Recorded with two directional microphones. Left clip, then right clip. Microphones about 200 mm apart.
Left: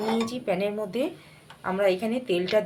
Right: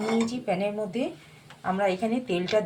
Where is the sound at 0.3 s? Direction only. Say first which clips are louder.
Left 1 dB; 30° left (ahead or behind).